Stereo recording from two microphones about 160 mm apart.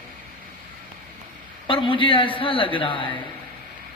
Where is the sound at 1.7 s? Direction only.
35° left (ahead or behind).